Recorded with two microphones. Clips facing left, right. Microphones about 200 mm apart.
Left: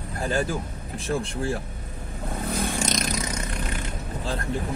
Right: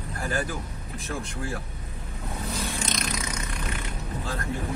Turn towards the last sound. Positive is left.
turn(degrees=45)  # may be behind; listen again after turning